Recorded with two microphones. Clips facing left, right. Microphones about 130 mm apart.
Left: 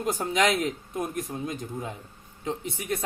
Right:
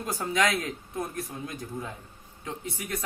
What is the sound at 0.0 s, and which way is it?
A man's voice, 20° left (ahead or behind).